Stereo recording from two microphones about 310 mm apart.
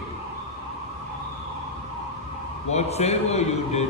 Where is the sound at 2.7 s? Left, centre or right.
Left.